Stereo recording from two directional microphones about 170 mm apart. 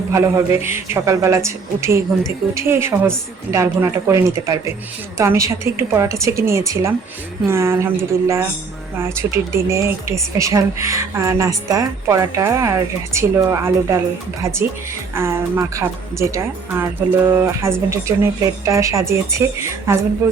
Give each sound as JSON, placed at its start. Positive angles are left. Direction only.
{"t": 0.1, "sound": "speech", "side_deg": -15}
{"t": 15.1, "sound": "speech", "side_deg": -15}